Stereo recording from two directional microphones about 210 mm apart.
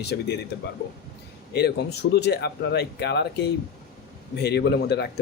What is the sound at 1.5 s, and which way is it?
A man's voice, 50° left (ahead or behind).